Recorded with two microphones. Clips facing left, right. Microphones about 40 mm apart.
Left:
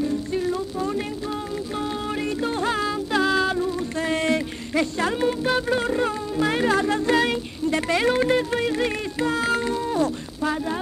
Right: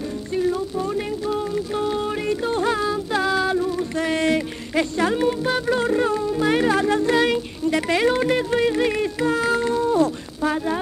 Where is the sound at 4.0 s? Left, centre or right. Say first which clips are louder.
Right 2 dB; right.